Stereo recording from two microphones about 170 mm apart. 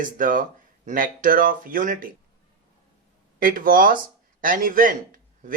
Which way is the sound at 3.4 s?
55° right (ahead or behind).